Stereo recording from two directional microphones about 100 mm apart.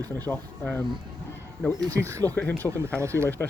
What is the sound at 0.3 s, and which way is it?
Speech, 20° left (ahead or behind).